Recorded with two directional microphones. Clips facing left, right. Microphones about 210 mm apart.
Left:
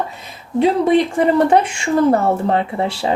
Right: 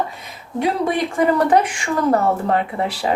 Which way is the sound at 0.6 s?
25° left (ahead or behind).